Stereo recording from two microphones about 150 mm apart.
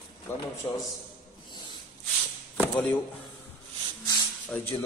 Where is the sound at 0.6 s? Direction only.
25° left (ahead or behind).